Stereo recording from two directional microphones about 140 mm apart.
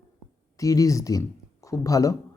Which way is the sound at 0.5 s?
25° left (ahead or behind).